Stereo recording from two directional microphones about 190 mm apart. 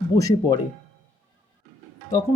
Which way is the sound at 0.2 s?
15° left (ahead or behind).